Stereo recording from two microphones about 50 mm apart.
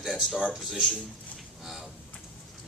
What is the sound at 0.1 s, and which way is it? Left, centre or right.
Speech, centre.